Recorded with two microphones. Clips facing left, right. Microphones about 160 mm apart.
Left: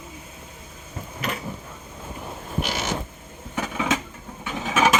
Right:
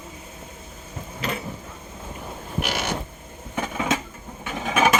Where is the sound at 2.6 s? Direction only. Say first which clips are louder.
Right 1 dB; 65° right (ahead or behind).